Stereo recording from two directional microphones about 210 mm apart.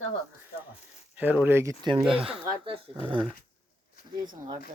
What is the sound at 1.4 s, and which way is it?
Speech, 15° right (ahead or behind).